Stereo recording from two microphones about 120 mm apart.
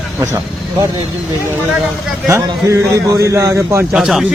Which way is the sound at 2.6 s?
25° right (ahead or behind).